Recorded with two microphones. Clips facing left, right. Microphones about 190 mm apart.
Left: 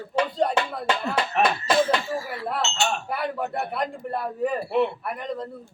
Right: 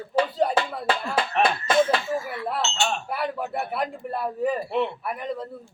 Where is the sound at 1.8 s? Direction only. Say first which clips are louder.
Right 4 dB; 30° left (ahead or behind).